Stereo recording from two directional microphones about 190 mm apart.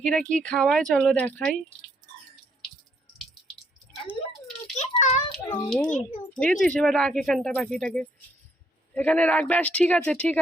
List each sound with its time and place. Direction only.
0.0 s speech: 5° left (ahead or behind)
4.8 s child singing: 40° left (ahead or behind)
5.3 s speech: centre (ahead or behind)